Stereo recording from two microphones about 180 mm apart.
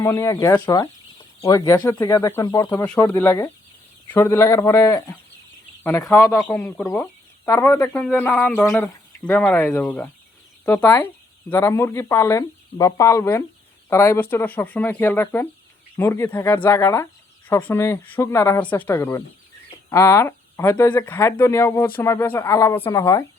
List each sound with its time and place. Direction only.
0.0 s speech: 15° left (ahead or behind)
2.8 s speech: 5° left (ahead or behind)